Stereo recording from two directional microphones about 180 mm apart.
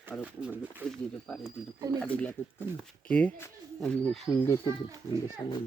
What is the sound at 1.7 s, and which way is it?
Speech, 20° right (ahead or behind).